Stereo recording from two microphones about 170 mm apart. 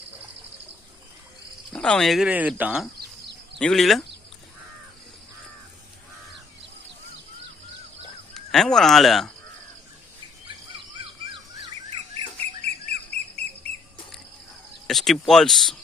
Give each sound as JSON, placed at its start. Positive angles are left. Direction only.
{"t": 1.7, "sound": "speech", "side_deg": 5}
{"t": 3.0, "sound": "a sound", "side_deg": -85}
{"t": 3.6, "sound": "speech", "side_deg": 5}
{"t": 8.3, "sound": "speech", "side_deg": 5}
{"t": 12.6, "sound": "bird", "side_deg": -40}
{"t": 14.8, "sound": "speech", "side_deg": 0}